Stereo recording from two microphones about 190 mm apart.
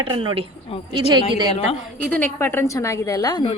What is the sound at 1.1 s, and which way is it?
Speech, 25° right (ahead or behind).